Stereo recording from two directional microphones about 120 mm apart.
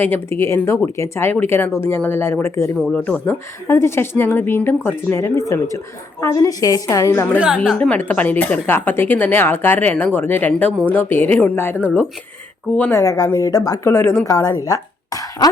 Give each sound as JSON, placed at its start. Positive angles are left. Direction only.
{"t": 0.0, "sound": "a woman's voice", "side_deg": 20}
{"t": 7.3, "sound": "a woman's voice", "side_deg": -10}
{"t": 7.8, "sound": "speech", "side_deg": 10}
{"t": 12.9, "sound": "a woman's voice", "side_deg": 25}